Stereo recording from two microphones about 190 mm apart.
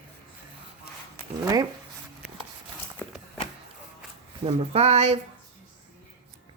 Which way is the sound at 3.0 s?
10° left (ahead or behind).